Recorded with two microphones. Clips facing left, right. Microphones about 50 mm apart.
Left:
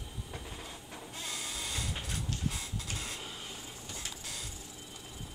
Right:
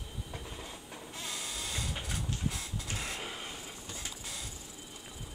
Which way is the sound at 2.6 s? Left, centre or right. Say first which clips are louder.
Right 1 dB; right.